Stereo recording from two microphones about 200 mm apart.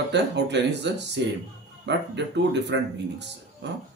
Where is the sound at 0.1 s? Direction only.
60° right (ahead or behind).